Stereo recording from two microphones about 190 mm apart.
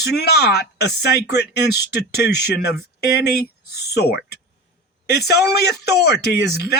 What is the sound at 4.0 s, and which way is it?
Speech, 55° left (ahead or behind).